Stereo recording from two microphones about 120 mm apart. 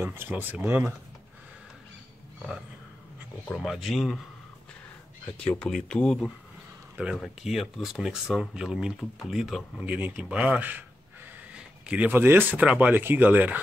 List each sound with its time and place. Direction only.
0.0 s speech: 20° right (ahead or behind)
3.5 s speech: centre (ahead or behind)
5.4 s speech: 10° left (ahead or behind)
9.8 s speech: 15° right (ahead or behind)